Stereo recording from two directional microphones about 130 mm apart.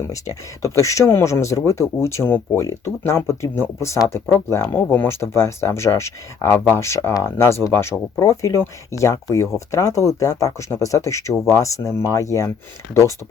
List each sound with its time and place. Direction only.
0.1 s speech: 25° left (ahead or behind)